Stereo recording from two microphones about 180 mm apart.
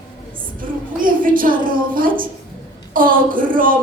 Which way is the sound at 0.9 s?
50° right (ahead or behind).